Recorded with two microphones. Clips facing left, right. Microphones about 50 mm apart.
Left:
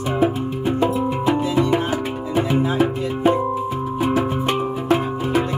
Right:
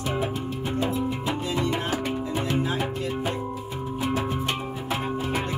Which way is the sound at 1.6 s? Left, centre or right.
Left.